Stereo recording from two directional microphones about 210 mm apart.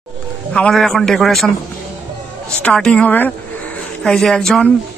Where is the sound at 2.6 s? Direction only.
5° left (ahead or behind).